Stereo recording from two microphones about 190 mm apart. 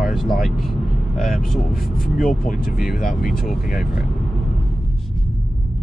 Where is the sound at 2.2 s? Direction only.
Centre (ahead or behind).